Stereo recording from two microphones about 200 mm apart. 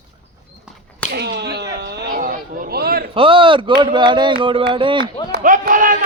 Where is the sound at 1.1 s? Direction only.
55° right (ahead or behind).